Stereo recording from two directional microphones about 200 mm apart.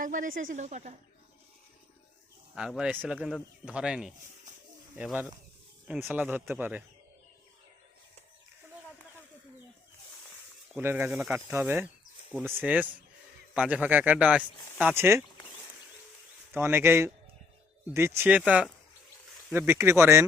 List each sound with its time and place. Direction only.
0.0 s speech: 40° right (ahead or behind)
2.6 s speech: 5° right (ahead or behind)
10.8 s speech: 10° right (ahead or behind)
16.5 s speech: 10° right (ahead or behind)